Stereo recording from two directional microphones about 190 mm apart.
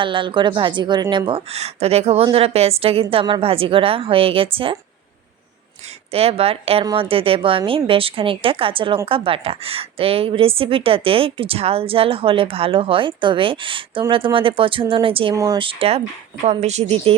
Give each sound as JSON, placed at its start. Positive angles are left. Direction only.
{"t": 0.0, "sound": "a woman's voice", "side_deg": -25}
{"t": 1.3, "sound": "a woman's voice", "side_deg": -30}
{"t": 6.1, "sound": "a woman's voice", "side_deg": -30}